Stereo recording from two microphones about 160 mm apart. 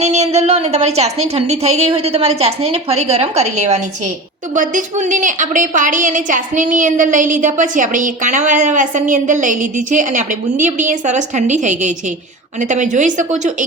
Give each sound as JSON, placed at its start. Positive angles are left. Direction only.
{"t": 0.0, "sound": "a woman's voice", "side_deg": -45}